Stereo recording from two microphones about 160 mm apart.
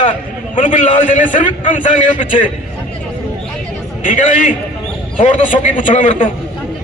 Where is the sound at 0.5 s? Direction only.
50° left (ahead or behind).